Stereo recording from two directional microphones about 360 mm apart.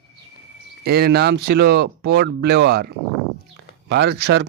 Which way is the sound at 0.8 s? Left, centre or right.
Right.